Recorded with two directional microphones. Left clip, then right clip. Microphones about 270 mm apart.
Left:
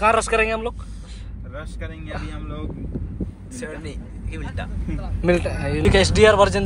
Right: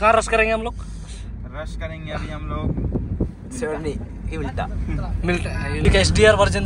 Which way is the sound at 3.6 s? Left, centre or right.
Right.